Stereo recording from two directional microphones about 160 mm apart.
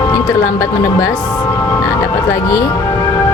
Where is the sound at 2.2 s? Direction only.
20° left (ahead or behind).